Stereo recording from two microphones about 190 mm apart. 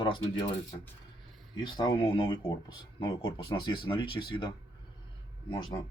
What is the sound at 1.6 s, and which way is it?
Speech, 25° left (ahead or behind).